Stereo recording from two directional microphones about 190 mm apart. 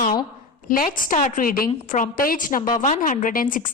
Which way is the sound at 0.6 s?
45° left (ahead or behind).